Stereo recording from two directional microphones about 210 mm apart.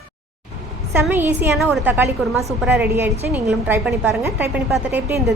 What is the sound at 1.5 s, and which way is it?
Speech, centre (ahead or behind).